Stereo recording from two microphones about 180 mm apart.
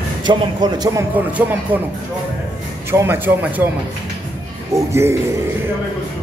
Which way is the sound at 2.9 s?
15° right (ahead or behind).